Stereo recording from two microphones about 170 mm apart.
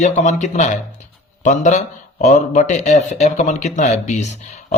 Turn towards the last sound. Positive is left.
turn(degrees=45)  # may be behind; listen again after turning